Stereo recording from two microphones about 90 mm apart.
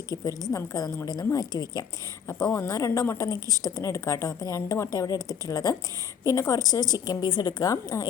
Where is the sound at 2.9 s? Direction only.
30° left (ahead or behind).